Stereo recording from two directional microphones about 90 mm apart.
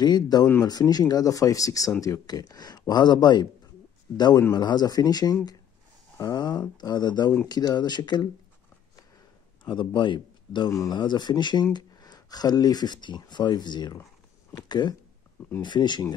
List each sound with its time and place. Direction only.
0.0 s speech: 50° left (ahead or behind)
4.6 s speech: 50° left (ahead or behind)
9.7 s a man's voice: 60° left (ahead or behind)